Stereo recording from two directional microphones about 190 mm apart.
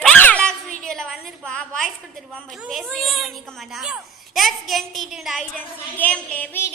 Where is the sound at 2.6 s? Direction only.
Centre (ahead or behind).